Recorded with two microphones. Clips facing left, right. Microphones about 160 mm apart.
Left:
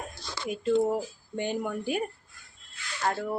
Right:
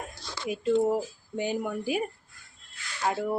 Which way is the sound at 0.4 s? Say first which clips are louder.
Right 1 dB; 5° right (ahead or behind).